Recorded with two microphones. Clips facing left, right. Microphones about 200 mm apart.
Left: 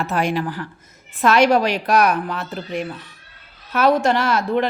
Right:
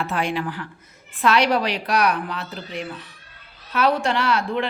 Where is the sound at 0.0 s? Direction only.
40° left (ahead or behind).